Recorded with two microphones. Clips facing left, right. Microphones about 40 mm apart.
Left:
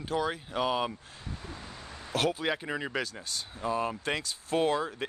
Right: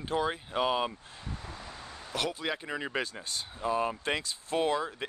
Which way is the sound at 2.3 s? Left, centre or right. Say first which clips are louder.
Left 3 dB; centre.